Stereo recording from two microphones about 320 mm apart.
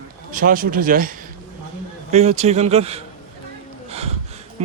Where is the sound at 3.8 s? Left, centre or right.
Centre.